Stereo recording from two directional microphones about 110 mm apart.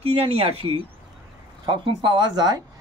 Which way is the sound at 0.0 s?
70° right (ahead or behind).